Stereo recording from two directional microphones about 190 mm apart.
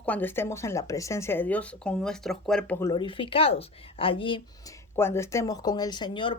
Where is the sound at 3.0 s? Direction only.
25° left (ahead or behind).